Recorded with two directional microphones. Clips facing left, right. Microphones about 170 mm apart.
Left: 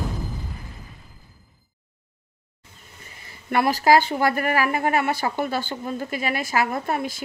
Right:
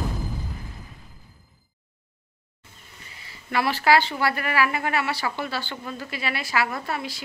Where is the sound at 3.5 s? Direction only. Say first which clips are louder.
Left 3 dB; 45° left (ahead or behind).